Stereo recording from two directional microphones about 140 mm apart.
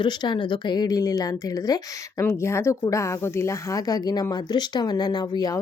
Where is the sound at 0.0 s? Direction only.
30° left (ahead or behind).